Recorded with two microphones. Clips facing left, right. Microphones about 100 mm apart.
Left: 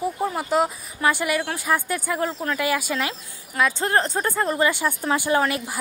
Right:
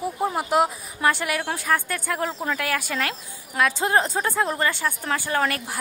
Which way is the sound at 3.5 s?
5° right (ahead or behind).